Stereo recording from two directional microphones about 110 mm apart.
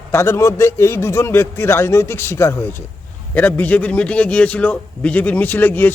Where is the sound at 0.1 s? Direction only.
25° left (ahead or behind).